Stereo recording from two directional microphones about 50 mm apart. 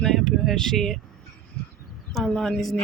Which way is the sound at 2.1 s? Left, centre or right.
Centre.